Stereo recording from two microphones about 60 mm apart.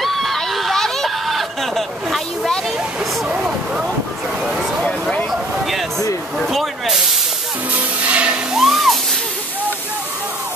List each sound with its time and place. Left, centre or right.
0.0 s a sound: centre
3.3 s vehicle: centre
4.5 s a sound: centre
6.3 s spray: centre
7.7 s music: right
8.5 s music: centre